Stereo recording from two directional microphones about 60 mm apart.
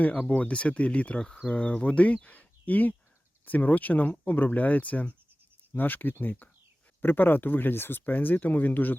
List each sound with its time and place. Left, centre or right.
0.0 s speech: left